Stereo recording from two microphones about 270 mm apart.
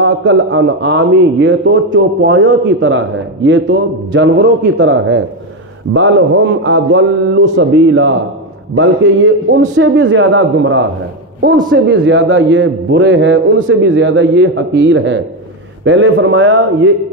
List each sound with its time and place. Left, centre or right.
0.0 s a man's voice: right
6.6 s a man's voice: right